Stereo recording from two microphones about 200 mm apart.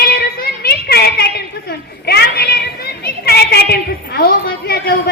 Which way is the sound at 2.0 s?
50° left (ahead or behind).